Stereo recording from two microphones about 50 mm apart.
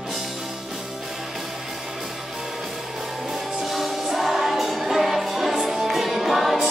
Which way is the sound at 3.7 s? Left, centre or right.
Centre.